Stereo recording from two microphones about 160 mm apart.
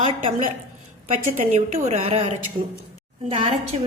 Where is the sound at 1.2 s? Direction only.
55° right (ahead or behind).